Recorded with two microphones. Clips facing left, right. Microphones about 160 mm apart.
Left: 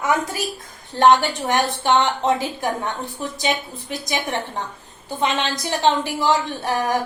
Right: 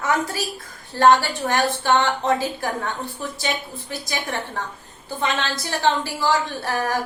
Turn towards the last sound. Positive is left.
turn(degrees=20)  # may be behind; listen again after turning